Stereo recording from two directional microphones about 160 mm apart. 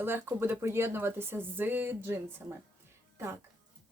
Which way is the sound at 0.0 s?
15° right (ahead or behind).